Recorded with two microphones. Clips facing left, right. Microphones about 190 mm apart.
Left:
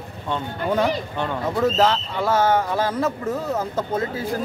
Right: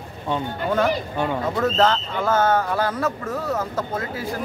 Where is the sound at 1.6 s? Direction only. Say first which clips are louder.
Left 1 dB; 10° left (ahead or behind).